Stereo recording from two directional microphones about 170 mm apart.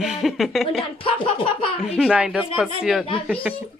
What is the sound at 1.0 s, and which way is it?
Speech, 30° left (ahead or behind).